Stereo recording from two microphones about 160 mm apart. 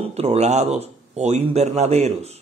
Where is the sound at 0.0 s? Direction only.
40° right (ahead or behind).